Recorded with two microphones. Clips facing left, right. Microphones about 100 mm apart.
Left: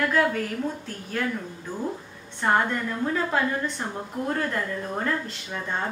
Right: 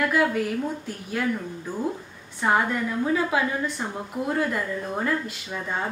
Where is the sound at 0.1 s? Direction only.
10° right (ahead or behind).